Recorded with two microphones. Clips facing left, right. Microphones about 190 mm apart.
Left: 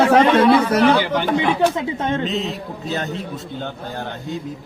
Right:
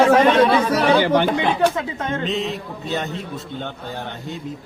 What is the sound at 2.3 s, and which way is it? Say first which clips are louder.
Speech: even; centre (ahead or behind).